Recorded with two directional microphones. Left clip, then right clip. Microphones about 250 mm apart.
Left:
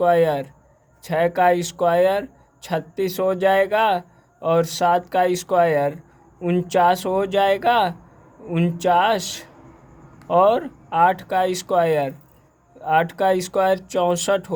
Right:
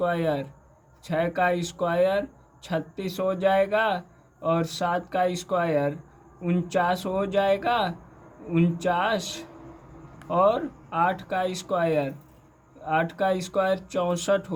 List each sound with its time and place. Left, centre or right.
0.0 s speech: left